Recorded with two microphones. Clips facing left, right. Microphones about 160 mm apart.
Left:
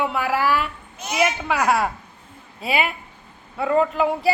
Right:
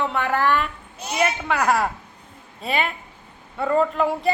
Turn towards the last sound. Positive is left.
turn(degrees=5)  # may be behind; listen again after turning